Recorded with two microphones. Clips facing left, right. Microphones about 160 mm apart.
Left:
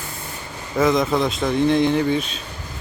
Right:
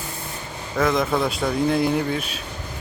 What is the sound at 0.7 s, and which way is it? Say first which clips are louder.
A man's voice: left 3 dB; centre (ahead or behind).